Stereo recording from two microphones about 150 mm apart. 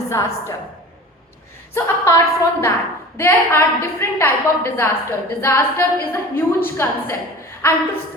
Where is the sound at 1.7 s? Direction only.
20° left (ahead or behind).